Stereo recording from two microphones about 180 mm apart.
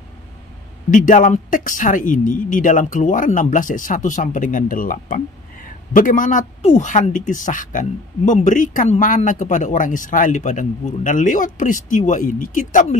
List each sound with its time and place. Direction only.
0.8 s speech: 45° left (ahead or behind)